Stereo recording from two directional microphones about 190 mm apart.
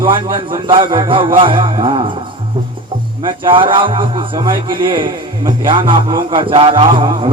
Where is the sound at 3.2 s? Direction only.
25° right (ahead or behind).